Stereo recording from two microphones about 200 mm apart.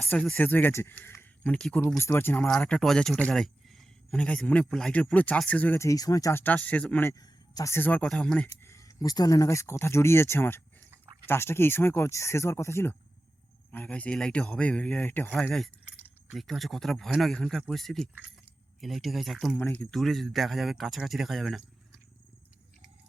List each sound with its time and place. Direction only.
0.1 s speech: 5° left (ahead or behind)
10.8 s a sound: 10° right (ahead or behind)
11.3 s speech: 10° left (ahead or behind)